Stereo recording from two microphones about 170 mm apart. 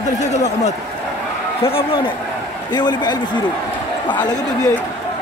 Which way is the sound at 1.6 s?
35° left (ahead or behind).